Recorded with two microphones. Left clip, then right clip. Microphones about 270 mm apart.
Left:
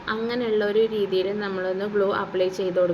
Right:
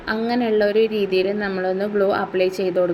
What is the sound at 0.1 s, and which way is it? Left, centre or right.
Speech, centre.